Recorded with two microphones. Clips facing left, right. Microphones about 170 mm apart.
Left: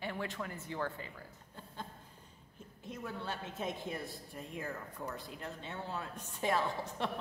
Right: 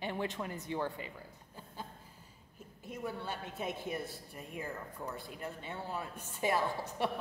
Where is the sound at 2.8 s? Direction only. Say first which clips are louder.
Right 2 dB; 5° right (ahead or behind).